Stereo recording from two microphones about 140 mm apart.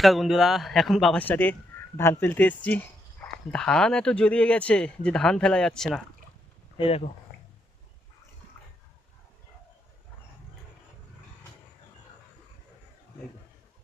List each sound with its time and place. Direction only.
0.0 s speech: centre (ahead or behind)
1.2 s speech: 10° left (ahead or behind)
6.7 s speech: 40° left (ahead or behind)